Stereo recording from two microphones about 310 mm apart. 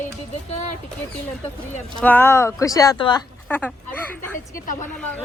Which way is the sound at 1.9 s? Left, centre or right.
Centre.